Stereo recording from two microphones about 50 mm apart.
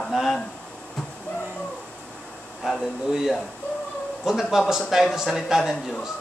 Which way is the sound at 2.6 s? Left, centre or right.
Centre.